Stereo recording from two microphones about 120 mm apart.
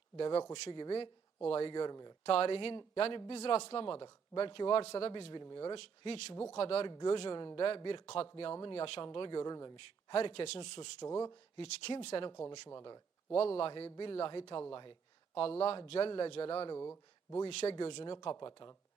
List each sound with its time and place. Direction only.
0.7 s speech: 45° left (ahead or behind)
2.2 s a man's voice: 55° left (ahead or behind)
3.3 s speech: 60° left (ahead or behind)
5.3 s speech: 40° left (ahead or behind)
5.7 s a man's voice: 60° left (ahead or behind)
10.6 s speech: 40° left (ahead or behind)
11.5 s speech: 55° left (ahead or behind)
12.5 s speech: 35° left (ahead or behind)
13.3 s a man's voice: 55° left (ahead or behind)
15.4 s a man's voice: 55° left (ahead or behind)
16.7 s speech: 25° left (ahead or behind)
17.4 s speech: 55° left (ahead or behind); by 18.7 s 40° left (ahead or behind)